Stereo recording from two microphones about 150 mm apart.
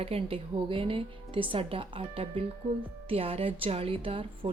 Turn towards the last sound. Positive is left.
turn(degrees=-35)  # may be behind; listen again after turning